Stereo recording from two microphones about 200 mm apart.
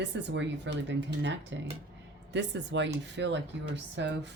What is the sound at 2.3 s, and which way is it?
Speech, 60° right (ahead or behind).